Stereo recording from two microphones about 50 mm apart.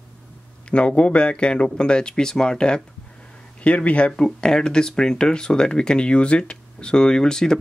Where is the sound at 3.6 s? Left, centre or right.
Left.